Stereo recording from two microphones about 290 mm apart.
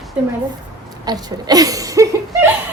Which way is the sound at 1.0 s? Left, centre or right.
Centre.